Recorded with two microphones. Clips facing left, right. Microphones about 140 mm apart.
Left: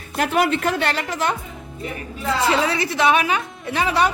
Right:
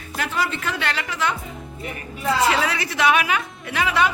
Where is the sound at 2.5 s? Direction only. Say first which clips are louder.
Left 2 dB; 30° left (ahead or behind).